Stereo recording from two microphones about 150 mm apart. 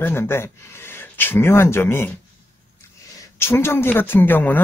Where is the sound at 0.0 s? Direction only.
15° left (ahead or behind).